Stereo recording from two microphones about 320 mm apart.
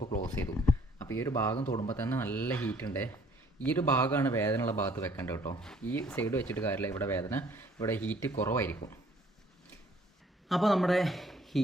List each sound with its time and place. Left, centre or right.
0.0 s a sound: left
0.7 s a man's voice: centre
10.5 s speech: centre